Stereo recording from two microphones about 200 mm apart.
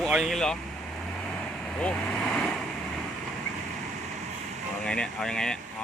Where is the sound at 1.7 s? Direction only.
5° left (ahead or behind).